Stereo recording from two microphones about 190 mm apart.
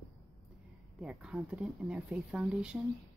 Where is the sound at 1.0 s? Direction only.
5° right (ahead or behind).